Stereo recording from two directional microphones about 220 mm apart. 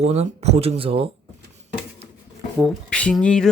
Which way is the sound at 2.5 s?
5° left (ahead or behind).